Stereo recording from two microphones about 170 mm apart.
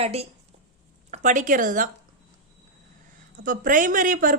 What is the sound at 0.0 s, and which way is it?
Speech, 35° right (ahead or behind).